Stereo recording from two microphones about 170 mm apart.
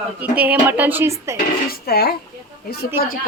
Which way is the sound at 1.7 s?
65° left (ahead or behind).